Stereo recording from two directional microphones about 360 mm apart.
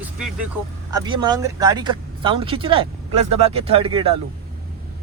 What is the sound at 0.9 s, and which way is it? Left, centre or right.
Speech, centre.